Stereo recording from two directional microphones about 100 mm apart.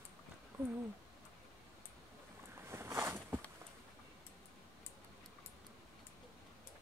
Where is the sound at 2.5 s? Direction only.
25° right (ahead or behind).